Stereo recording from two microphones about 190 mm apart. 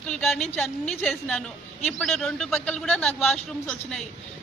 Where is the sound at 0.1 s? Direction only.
5° left (ahead or behind).